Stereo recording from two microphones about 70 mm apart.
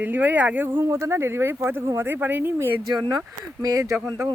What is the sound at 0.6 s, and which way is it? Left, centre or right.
Speech, right.